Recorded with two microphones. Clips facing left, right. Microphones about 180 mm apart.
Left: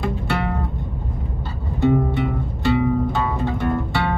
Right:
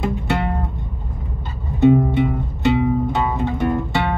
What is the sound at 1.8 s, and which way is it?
Music, 20° right (ahead or behind).